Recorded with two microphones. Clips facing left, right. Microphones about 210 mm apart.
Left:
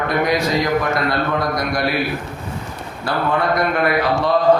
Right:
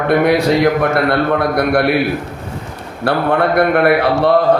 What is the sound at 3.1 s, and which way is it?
A man's voice, 65° right (ahead or behind).